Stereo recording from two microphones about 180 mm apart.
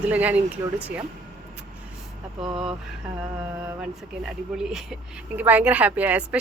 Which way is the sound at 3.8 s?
Centre (ahead or behind).